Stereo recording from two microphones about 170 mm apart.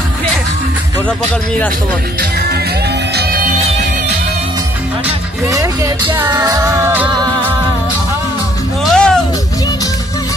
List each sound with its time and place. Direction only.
3.2 s music: 60° right (ahead or behind)
5.5 s music: 20° right (ahead or behind)
7.2 s music: 25° right (ahead or behind)
8.8 s music: 5° left (ahead or behind)